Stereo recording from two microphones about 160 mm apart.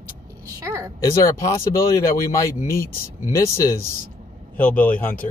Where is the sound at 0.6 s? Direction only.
20° right (ahead or behind).